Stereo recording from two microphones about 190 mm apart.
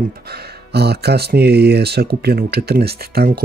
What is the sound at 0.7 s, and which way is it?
Speech, 60° right (ahead or behind).